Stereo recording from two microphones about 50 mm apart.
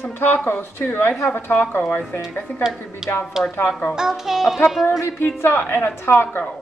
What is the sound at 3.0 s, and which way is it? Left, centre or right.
Music, centre.